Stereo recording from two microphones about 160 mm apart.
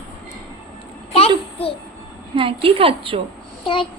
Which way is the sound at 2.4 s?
35° right (ahead or behind).